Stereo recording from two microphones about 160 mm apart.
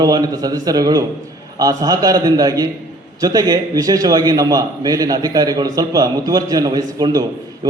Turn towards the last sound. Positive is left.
turn(degrees=-25)  # may be behind; listen again after turning